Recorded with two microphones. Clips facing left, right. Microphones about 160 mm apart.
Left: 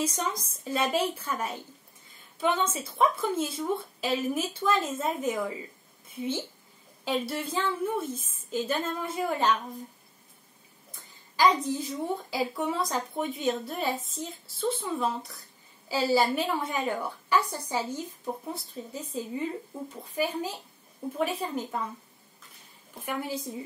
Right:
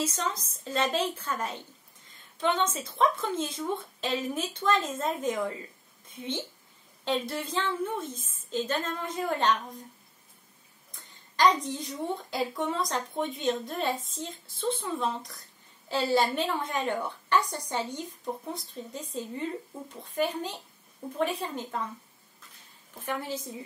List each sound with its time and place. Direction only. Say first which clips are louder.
0.0 s speech: left 1 dB; 15° left (ahead or behind)
7.1 s speech: even; 5° left (ahead or behind)
11.3 s a woman's voice: left 1 dB; 5° left (ahead or behind)
23.0 s speech: left 1 dB; 10° left (ahead or behind)